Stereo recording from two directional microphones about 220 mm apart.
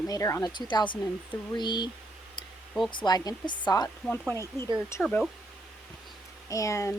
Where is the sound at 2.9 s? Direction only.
20° left (ahead or behind); by 5.3 s 5° left (ahead or behind).